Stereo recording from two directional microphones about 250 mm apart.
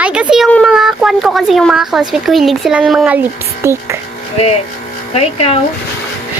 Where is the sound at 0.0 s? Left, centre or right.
Centre.